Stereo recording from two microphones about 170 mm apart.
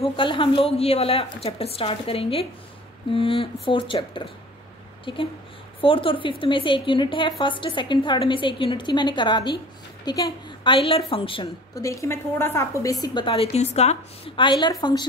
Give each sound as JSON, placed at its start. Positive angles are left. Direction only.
{"t": 0.0, "sound": "a woman's voice", "side_deg": 30}
{"t": 11.7, "sound": "a woman's voice", "side_deg": 20}